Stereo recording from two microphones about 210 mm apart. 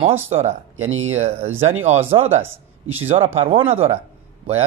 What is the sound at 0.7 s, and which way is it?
Speech, 75° right (ahead or behind).